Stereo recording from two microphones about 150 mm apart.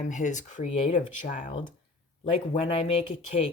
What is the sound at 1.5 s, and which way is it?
A woman's voice, 30° left (ahead or behind).